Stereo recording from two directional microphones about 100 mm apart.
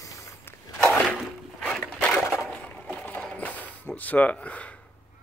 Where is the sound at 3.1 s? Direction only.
15° left (ahead or behind).